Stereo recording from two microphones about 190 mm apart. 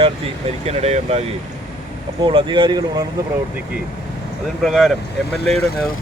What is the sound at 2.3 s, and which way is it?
Speech, 25° right (ahead or behind).